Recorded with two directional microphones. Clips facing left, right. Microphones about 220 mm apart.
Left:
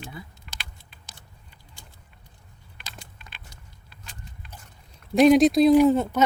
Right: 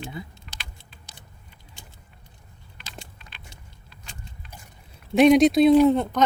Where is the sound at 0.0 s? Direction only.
25° right (ahead or behind).